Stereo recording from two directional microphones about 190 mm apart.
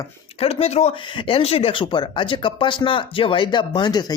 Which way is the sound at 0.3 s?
30° left (ahead or behind).